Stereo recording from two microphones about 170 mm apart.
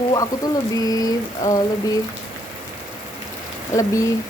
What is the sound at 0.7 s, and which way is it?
Speech, 20° left (ahead or behind).